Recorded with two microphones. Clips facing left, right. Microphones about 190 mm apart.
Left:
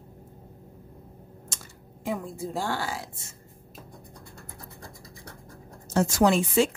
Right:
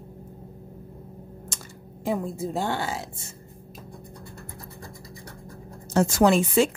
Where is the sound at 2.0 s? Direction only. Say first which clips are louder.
Right 4 dB; 25° right (ahead or behind).